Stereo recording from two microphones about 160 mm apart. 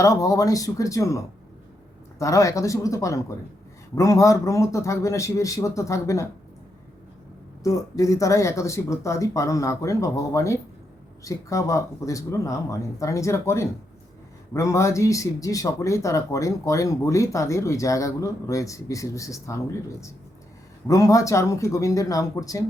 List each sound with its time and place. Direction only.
0.0 s speech: 20° left (ahead or behind)
7.6 s speech: 20° left (ahead or behind)
20.8 s speech: 20° left (ahead or behind)